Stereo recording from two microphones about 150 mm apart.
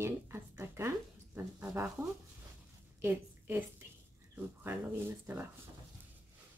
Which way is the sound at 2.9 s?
15° right (ahead or behind).